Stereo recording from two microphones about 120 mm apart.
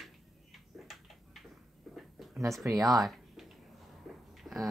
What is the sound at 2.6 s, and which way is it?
Speech, 20° right (ahead or behind).